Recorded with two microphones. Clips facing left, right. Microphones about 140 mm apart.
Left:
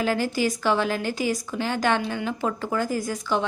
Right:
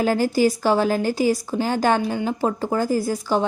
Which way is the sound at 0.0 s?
40° right (ahead or behind).